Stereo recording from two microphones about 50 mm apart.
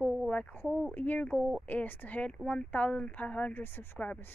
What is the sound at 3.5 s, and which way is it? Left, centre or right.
Speech, left.